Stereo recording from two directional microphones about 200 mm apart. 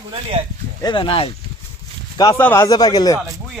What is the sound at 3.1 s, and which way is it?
Speech, 15° right (ahead or behind).